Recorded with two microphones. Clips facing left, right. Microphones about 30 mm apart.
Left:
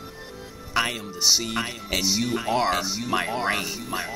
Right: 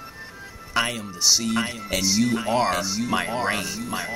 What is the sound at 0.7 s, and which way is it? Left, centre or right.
Speech, centre.